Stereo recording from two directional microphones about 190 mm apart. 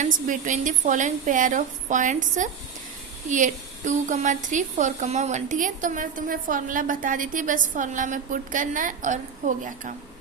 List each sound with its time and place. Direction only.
0.0 s a woman's voice: 40° right (ahead or behind)